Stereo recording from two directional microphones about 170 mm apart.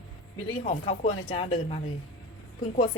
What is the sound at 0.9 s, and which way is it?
A woman's voice, 30° left (ahead or behind).